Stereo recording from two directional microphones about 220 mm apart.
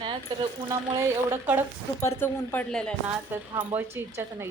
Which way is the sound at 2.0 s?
10° left (ahead or behind).